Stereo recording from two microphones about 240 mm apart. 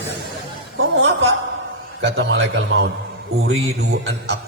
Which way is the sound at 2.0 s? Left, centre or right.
Right.